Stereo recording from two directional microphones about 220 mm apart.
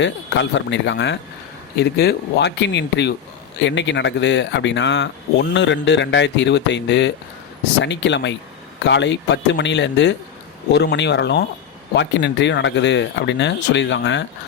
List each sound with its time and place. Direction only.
0.0 s speech: 55° left (ahead or behind)